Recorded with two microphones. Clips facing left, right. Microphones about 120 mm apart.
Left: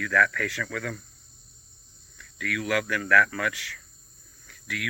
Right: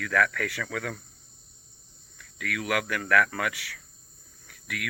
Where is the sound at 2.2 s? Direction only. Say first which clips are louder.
Left 2 dB; 55° right (ahead or behind).